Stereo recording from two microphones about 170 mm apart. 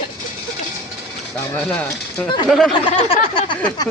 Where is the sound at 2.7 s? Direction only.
30° left (ahead or behind).